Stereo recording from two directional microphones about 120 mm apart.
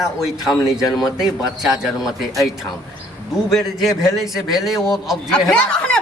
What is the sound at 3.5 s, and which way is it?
A man's voice, centre (ahead or behind).